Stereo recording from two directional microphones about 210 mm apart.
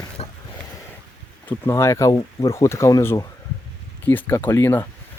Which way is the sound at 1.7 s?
15° left (ahead or behind).